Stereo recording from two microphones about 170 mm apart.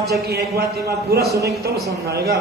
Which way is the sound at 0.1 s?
70° right (ahead or behind).